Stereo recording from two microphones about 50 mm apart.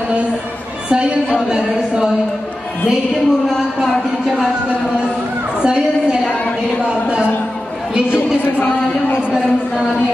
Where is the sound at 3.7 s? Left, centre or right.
Centre.